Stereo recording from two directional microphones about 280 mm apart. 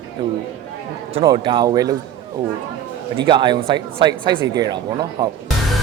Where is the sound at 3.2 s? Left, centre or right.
Centre.